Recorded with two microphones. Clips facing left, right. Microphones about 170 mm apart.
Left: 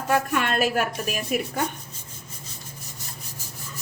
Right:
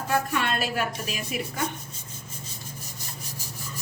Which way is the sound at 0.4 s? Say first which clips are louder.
Left 4 dB; 50° left (ahead or behind).